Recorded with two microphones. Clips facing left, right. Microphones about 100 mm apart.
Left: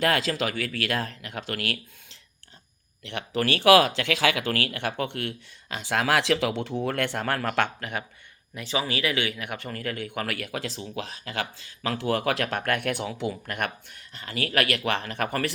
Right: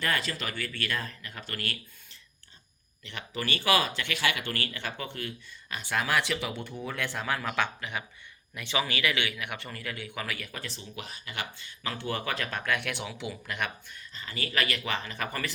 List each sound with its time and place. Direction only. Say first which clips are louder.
0.0 s speech: left 7 dB; 90° left
3.0 s speech: left 8 dB; 70° left (ahead or behind)
5.7 s speech: left 4 dB; 90° left; by 8.0 s 50° left (ahead or behind)
8.5 s speech: left 3 dB; 35° left (ahead or behind); by 15.5 s 60° left (ahead or behind)